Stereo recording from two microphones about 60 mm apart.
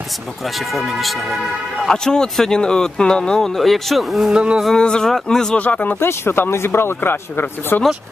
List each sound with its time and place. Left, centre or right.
0.7 s speech: centre
4.3 s speech: centre
4.7 s speech: centre
5.6 s speech: left
5.9 s a man's voice: left